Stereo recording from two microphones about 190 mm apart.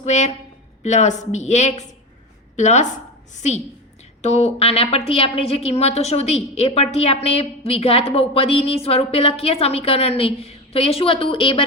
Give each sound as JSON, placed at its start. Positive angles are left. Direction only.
{"t": 0.0, "sound": "a woman's voice", "side_deg": 40}